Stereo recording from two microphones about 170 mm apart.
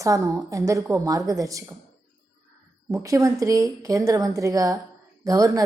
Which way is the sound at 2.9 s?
20° right (ahead or behind).